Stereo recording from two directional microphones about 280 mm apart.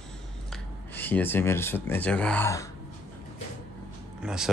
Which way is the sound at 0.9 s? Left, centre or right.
Centre.